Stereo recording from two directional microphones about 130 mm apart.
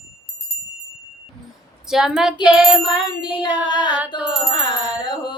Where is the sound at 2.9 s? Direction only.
35° left (ahead or behind).